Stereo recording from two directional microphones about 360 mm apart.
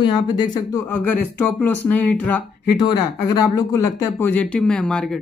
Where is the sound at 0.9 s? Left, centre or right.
Left.